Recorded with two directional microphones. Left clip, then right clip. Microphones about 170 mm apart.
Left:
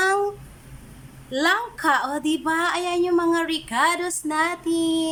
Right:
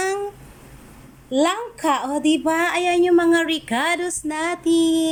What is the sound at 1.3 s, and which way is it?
A woman's voice, 10° right (ahead or behind).